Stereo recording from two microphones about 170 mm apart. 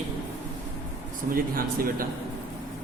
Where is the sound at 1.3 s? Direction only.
60° right (ahead or behind).